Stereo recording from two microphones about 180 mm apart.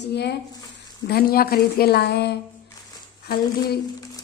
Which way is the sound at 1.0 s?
60° left (ahead or behind).